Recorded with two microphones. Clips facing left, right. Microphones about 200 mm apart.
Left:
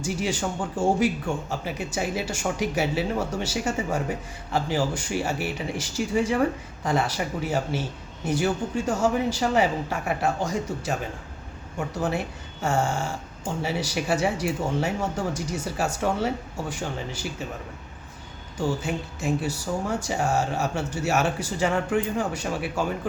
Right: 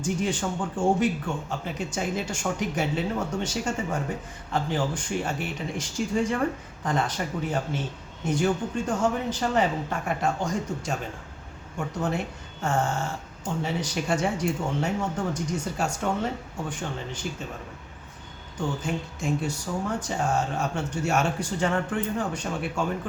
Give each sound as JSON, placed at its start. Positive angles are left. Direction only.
{"t": 0.0, "sound": "speech", "side_deg": 10}
{"t": 18.8, "sound": "speech", "side_deg": 5}